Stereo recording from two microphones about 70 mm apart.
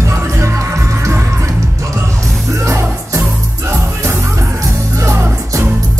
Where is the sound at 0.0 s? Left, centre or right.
Right.